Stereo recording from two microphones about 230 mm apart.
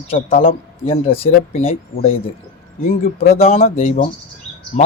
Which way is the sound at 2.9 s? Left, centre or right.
Left.